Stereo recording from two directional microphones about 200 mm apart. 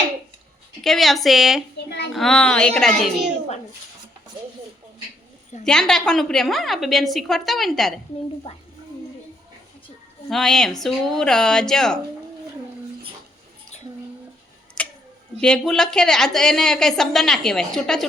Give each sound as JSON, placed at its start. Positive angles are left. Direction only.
{"t": 0.8, "sound": "a woman's voice", "side_deg": 0}
{"t": 5.6, "sound": "a woman's voice", "side_deg": 5}
{"t": 8.5, "sound": "a child's voice", "side_deg": 30}
{"t": 10.2, "sound": "a woman's voice", "side_deg": 0}
{"t": 14.8, "sound": "tick-tock", "side_deg": 5}
{"t": 15.4, "sound": "a woman's voice", "side_deg": 5}